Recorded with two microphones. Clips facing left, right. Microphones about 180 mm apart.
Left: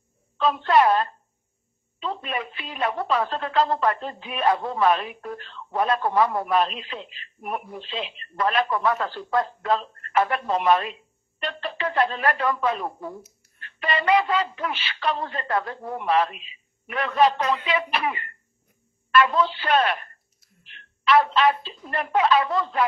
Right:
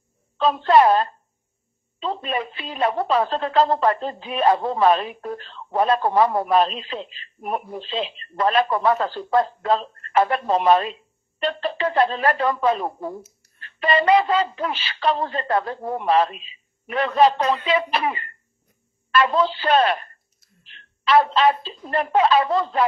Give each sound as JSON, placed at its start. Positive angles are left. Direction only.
{"t": 0.4, "sound": "a woman's voice", "side_deg": -30}